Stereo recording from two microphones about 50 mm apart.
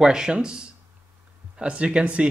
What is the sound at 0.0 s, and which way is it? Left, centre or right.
Speech, centre.